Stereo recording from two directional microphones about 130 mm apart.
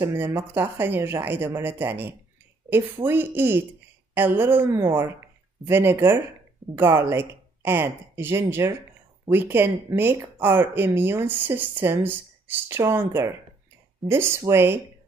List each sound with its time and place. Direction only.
0.0 s speech: 20° right (ahead or behind)